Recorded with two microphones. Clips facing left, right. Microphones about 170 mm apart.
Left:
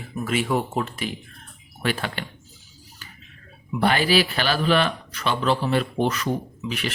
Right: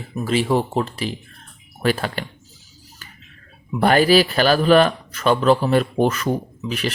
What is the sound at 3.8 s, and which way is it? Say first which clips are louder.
A man's voice: right 6 dB; 45° right (ahead or behind).